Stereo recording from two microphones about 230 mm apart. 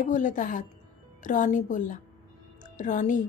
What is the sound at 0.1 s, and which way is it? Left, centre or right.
A woman's voice, left.